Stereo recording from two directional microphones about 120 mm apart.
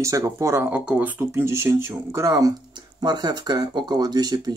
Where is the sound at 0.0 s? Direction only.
25° right (ahead or behind).